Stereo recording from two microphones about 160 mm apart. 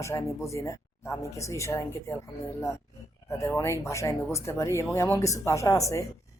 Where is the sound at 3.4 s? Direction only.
20° left (ahead or behind).